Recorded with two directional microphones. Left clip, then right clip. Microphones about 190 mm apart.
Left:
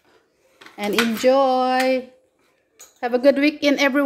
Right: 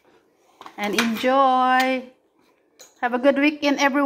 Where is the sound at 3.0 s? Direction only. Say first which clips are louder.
Left 2 dB; 25° left (ahead or behind).